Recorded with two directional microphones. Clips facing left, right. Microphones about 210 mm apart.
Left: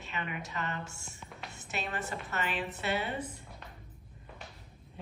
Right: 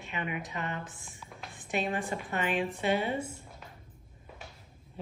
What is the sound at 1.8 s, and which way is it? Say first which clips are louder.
Speech: right 5 dB; 15° right (ahead or behind).